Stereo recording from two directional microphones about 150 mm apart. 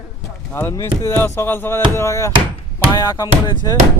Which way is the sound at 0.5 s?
15° left (ahead or behind).